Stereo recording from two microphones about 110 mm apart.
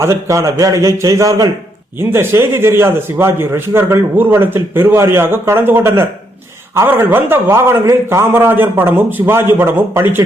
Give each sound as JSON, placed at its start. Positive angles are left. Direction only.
{"t": 0.0, "sound": "a man's voice", "side_deg": -25}